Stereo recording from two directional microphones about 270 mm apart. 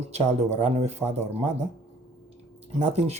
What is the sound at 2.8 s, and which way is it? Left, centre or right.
Speech, right.